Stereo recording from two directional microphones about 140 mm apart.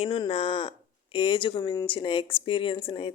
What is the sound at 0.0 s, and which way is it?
A woman's voice, 40° left (ahead or behind).